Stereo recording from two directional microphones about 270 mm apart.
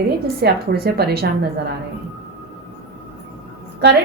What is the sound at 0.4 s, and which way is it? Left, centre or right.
Speech, right.